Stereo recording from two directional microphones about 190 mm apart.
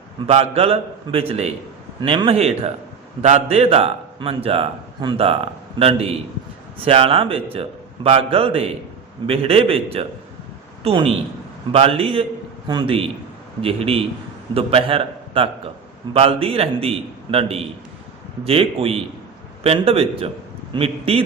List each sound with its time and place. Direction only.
0.3 s a man's voice: 30° right (ahead or behind)